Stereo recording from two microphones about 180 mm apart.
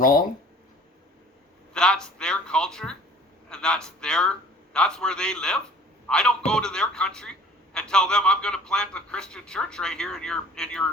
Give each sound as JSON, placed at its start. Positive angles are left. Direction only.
{"t": 0.0, "sound": "speech", "side_deg": 50}
{"t": 1.7, "sound": "a man's voice", "side_deg": 5}